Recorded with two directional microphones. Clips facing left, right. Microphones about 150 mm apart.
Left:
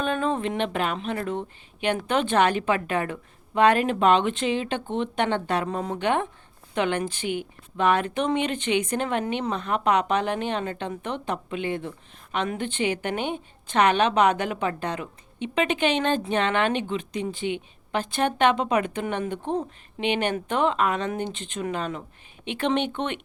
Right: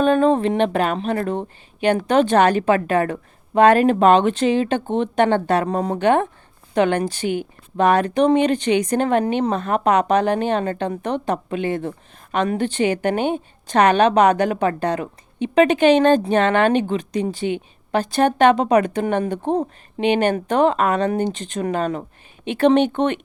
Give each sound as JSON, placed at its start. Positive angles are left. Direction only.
{"t": 0.0, "sound": "speech", "side_deg": -40}